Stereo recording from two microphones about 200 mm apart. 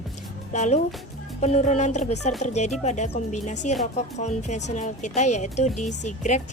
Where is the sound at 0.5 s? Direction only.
35° left (ahead or behind).